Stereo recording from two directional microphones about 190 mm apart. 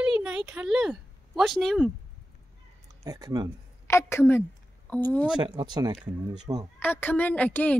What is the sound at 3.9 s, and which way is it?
A woman's voice, 15° left (ahead or behind).